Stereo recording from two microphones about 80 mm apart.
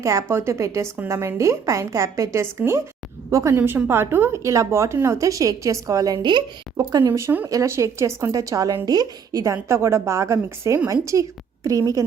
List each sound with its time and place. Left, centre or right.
0.0 s a woman's voice: right
3.6 s a woman's voice: right
7.1 s a woman's voice: right
9.4 s a woman's voice: right